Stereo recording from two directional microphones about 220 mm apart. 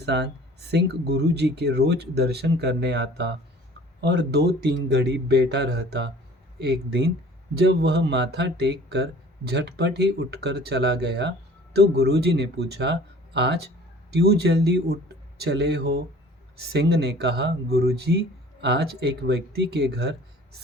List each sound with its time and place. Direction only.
0.0 s speech: 50° right (ahead or behind)